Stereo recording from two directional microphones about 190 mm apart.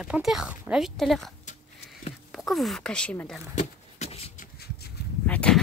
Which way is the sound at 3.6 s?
35° left (ahead or behind).